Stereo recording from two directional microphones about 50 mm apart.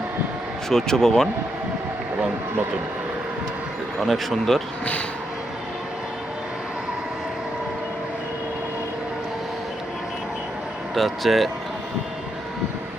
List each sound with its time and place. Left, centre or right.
0.7 s speech: centre
4.0 s speech: centre
10.9 s speech: centre